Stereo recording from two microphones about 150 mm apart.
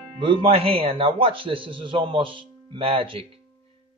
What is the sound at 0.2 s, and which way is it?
A man's voice, 35° right (ahead or behind).